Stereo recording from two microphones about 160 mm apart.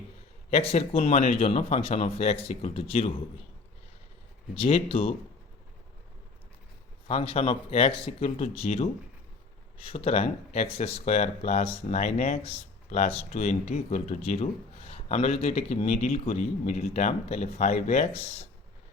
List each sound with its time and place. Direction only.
0.5 s speech: 40° left (ahead or behind)
4.5 s speech: 35° left (ahead or behind)
7.1 s speech: 35° left (ahead or behind)